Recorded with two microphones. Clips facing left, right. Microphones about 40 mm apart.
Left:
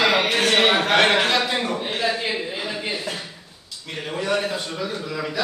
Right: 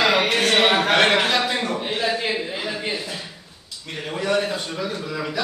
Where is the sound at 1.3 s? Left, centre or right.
Centre.